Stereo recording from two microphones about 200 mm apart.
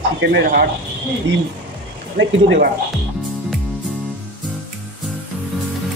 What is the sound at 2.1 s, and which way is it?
Speech, 55° right (ahead or behind).